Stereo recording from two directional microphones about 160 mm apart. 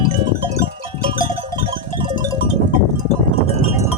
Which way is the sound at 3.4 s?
40° left (ahead or behind).